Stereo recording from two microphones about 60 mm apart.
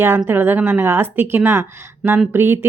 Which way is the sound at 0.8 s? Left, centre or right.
Right.